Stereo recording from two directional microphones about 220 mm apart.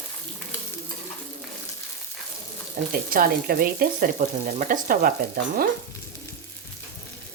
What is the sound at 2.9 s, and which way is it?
Speech, 40° right (ahead or behind).